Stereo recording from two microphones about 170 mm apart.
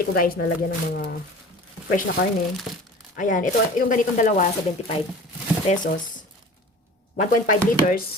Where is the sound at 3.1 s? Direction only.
50° left (ahead or behind).